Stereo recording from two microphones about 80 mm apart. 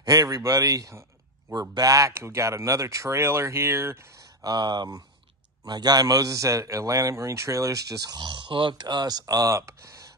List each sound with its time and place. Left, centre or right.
0.0 s a man's voice: right
1.5 s speech: right
4.2 s a man's voice: right
8.2 s speech: right